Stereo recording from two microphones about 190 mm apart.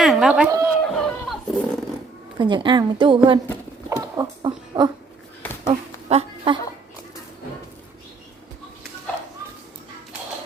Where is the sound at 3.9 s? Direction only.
15° right (ahead or behind).